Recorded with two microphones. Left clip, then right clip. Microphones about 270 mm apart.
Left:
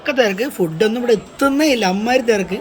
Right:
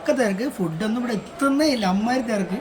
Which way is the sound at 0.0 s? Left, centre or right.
Centre.